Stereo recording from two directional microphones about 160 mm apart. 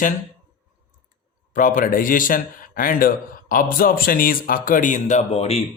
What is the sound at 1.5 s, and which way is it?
A man's voice, 55° left (ahead or behind).